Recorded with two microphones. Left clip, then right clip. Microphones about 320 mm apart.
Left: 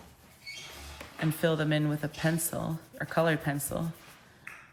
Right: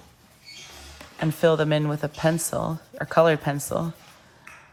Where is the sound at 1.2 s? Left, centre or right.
Centre.